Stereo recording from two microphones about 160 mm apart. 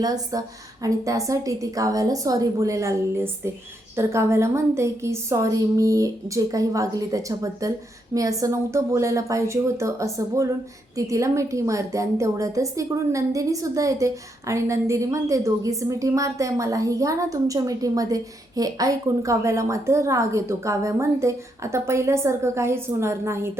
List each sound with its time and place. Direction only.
0.0 s a woman's voice: 25° right (ahead or behind)